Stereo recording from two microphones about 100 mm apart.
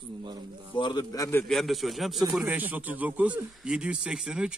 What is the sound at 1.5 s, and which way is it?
A man's voice, centre (ahead or behind).